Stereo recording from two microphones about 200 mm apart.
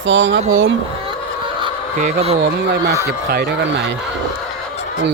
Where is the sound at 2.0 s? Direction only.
30° right (ahead or behind).